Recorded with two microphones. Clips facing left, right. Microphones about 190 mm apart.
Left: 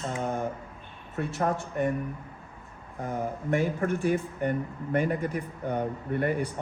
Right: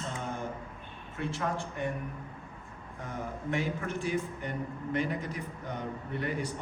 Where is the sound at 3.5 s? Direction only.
50° left (ahead or behind).